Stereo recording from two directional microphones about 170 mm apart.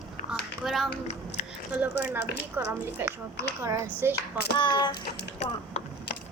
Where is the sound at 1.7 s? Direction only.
10° right (ahead or behind).